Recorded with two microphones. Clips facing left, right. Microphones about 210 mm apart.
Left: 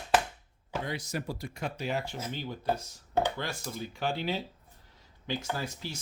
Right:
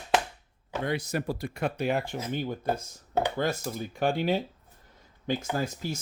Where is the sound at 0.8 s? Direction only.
60° right (ahead or behind).